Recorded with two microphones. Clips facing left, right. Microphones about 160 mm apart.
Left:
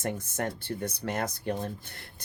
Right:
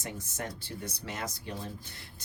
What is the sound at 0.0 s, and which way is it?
Speech, 55° left (ahead or behind).